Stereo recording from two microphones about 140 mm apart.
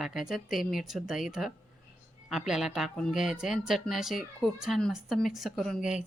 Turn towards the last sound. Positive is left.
turn(degrees=-5)  # may be behind; listen again after turning